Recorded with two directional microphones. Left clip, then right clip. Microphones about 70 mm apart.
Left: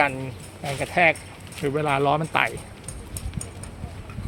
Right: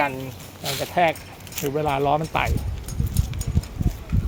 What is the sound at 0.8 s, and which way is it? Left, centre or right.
Speech, left.